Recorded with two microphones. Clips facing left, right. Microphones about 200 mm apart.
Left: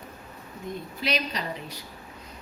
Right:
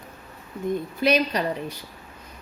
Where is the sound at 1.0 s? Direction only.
50° right (ahead or behind).